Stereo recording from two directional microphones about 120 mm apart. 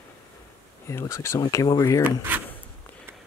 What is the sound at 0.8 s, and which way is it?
Speech, 25° left (ahead or behind).